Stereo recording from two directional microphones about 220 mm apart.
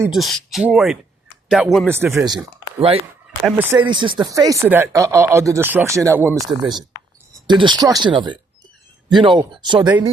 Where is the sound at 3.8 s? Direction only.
20° right (ahead or behind).